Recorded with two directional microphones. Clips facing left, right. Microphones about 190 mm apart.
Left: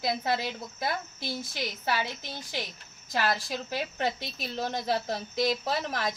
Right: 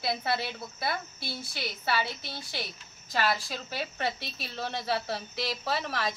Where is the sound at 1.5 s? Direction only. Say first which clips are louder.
Right 1 dB; 15° left (ahead or behind).